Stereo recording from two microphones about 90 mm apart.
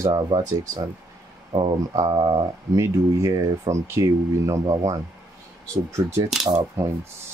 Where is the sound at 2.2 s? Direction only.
65° right (ahead or behind).